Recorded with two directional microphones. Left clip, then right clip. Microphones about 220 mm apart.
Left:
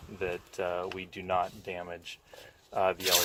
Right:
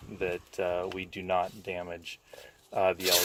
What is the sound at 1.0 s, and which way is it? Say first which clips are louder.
Rub: right 1 dB; 5° left (ahead or behind).